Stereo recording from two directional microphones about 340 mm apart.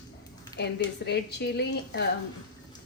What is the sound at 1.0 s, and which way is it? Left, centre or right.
A woman's voice, left.